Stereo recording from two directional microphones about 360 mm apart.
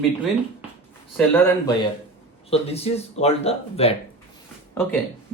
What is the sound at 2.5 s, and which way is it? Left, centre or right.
Speech, centre.